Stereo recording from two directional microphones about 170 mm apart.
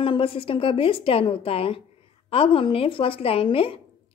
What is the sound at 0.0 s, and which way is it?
A woman's voice, 30° left (ahead or behind).